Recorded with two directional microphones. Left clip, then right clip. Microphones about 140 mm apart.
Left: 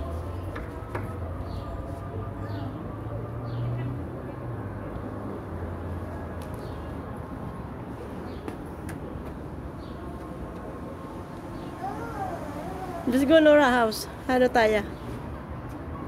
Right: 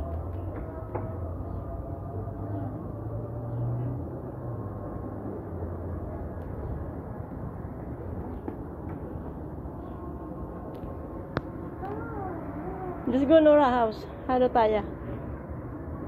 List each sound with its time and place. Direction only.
13.1 s a woman's voice: 25° left (ahead or behind)